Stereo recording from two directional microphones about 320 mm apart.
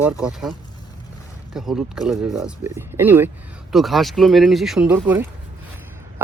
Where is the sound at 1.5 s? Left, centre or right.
Centre.